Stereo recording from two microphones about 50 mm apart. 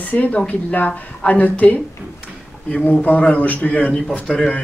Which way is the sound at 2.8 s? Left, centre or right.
Left.